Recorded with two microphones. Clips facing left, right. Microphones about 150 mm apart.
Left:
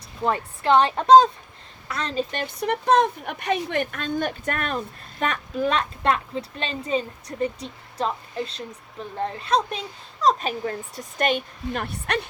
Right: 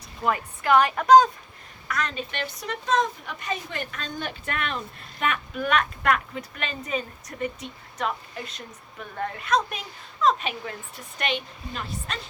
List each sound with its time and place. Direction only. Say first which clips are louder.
0.3 s a woman's voice: left 2 dB; 30° left (ahead or behind)
2.6 s a woman's voice: left 6 dB; 60° left (ahead or behind)